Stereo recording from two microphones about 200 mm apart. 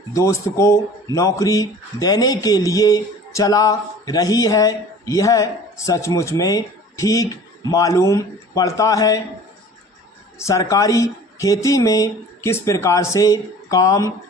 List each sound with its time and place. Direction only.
0.1 s speech: 15° left (ahead or behind)
10.3 s speech: 15° left (ahead or behind)